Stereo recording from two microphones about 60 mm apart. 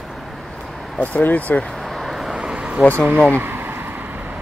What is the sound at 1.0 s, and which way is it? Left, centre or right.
Speech, left.